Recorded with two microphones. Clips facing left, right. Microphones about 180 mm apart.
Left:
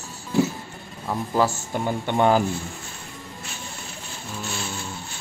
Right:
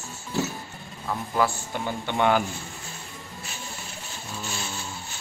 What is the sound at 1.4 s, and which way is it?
Speech, 30° left (ahead or behind).